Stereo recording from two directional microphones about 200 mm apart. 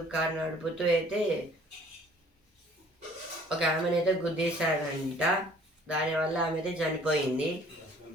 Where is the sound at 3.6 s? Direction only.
5° right (ahead or behind).